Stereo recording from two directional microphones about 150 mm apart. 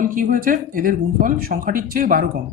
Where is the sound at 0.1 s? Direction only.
70° right (ahead or behind).